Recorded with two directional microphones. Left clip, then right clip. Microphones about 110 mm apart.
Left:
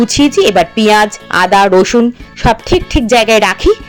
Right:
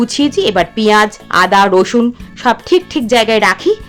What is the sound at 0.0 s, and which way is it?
Speech, 30° left (ahead or behind).